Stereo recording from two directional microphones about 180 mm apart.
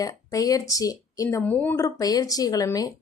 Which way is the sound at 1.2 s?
10° left (ahead or behind).